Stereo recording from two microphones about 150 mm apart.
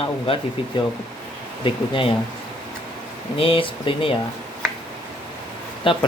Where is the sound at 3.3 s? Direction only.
35° left (ahead or behind).